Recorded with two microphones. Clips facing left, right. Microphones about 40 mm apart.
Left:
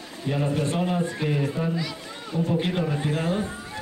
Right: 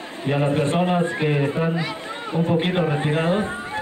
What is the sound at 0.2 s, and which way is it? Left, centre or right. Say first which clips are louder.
A man's voice: right 5 dB; right.